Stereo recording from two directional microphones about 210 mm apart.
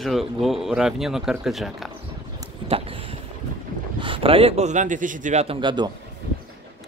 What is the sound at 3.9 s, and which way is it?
A man's voice, 25° right (ahead or behind).